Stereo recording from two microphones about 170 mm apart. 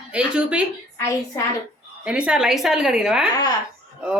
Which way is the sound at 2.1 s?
5° right (ahead or behind).